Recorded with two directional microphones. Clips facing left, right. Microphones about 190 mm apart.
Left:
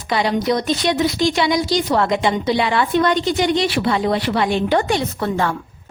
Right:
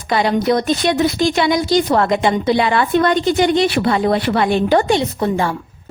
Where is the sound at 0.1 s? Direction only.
50° right (ahead or behind).